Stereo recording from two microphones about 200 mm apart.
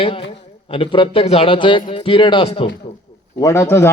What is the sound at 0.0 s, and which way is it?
A man's voice, 25° left (ahead or behind).